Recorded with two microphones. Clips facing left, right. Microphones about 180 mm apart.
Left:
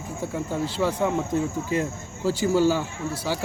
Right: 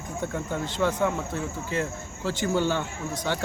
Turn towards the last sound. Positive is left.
turn(degrees=5)  # may be behind; listen again after turning